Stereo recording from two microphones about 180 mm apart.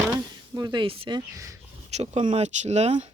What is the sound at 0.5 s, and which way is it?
Speech, 25° right (ahead or behind).